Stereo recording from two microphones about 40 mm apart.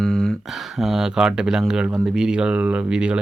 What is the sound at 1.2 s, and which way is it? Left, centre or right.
Speech, centre.